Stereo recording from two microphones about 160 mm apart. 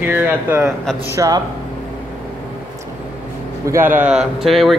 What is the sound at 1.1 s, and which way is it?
Speech, 20° right (ahead or behind).